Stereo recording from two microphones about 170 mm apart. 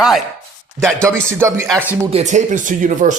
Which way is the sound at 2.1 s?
45° right (ahead or behind).